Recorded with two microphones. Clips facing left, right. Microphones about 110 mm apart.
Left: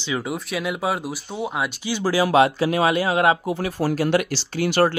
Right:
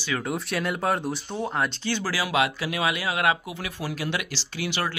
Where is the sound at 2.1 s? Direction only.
35° left (ahead or behind).